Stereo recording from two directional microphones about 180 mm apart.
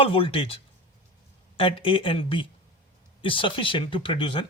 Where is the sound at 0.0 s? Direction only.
30° left (ahead or behind).